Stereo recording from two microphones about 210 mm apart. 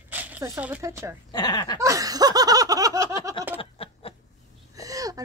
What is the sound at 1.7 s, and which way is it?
Snicker, 15° right (ahead or behind).